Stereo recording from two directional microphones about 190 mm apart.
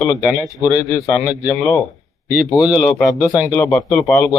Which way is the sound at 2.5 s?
20° left (ahead or behind).